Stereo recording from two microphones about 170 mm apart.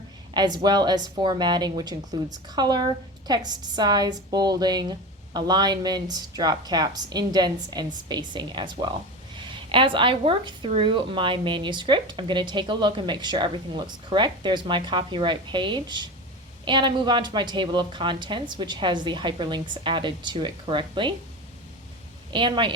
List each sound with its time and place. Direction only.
0.3 s a woman's voice: 25° right (ahead or behind)
22.3 s speech: 30° right (ahead or behind)